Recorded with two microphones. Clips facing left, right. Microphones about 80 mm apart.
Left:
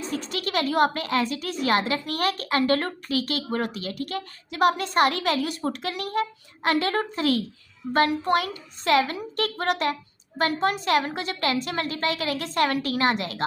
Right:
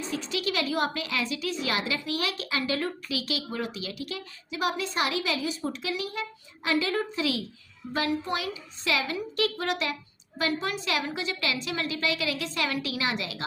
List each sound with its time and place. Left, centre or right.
0.1 s a woman's voice: left